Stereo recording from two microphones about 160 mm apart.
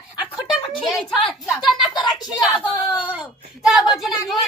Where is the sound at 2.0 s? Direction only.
5° right (ahead or behind).